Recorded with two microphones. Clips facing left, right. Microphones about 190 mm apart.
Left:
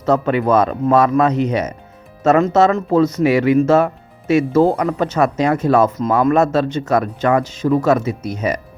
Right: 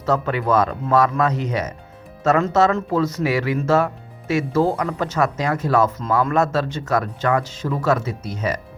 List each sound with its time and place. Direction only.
0.0 s speech: 20° left (ahead or behind)